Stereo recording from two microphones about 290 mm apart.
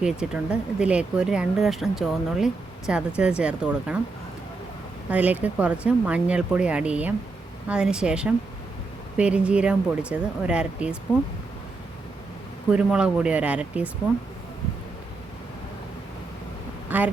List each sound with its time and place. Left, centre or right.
0.0 s speech: centre
5.1 s speech: centre
12.7 s speech: centre
16.9 s a sound: centre